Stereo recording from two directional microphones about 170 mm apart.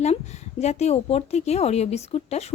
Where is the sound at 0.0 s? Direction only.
40° left (ahead or behind).